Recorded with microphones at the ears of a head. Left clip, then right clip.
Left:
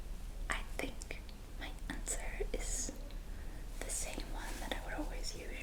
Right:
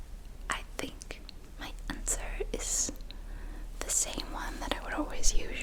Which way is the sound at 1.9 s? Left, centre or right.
Right.